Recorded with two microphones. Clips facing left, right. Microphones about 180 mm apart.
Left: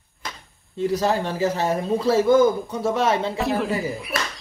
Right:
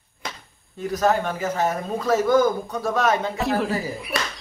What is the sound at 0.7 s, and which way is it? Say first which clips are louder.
Speech: even; 30° left (ahead or behind).